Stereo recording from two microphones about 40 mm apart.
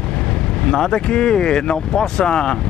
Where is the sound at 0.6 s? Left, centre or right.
Centre.